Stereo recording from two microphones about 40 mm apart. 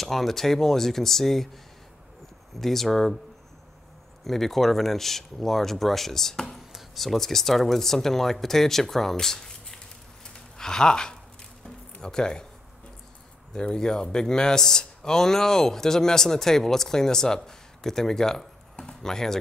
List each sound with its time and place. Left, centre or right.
0.0 s speech: centre
2.6 s speech: centre
4.2 s speech: centre
11.6 s music: centre
13.5 s speech: centre